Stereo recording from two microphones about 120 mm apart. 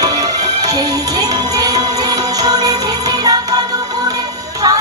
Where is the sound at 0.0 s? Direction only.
30° right (ahead or behind).